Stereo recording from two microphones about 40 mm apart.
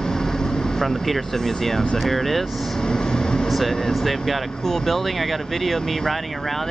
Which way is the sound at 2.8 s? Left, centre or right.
Centre.